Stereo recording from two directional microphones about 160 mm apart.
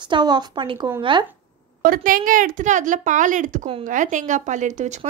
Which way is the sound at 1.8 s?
60° right (ahead or behind).